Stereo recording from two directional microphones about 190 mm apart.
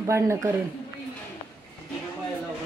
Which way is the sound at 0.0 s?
15° right (ahead or behind).